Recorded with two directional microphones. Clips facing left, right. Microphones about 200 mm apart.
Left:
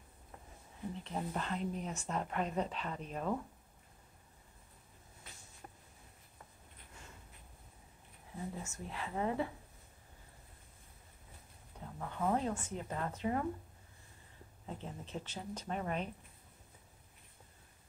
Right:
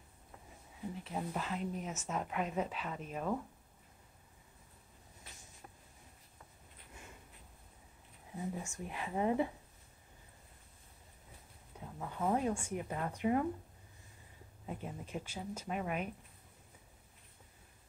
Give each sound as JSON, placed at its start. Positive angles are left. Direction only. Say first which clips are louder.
{"t": 1.0, "sound": "speech", "louder": "even", "side_deg": -5}
{"t": 8.4, "sound": "speech", "louder": "right 2 dB", "side_deg": -15}
{"t": 12.0, "sound": "speech", "louder": "right 1 dB", "side_deg": -10}
{"t": 14.7, "sound": "speech", "louder": "right 2 dB", "side_deg": -10}